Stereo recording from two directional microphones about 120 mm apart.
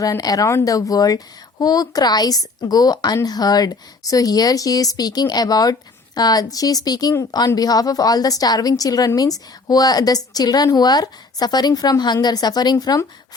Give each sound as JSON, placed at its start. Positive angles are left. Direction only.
{"t": 0.0, "sound": "speech", "side_deg": 30}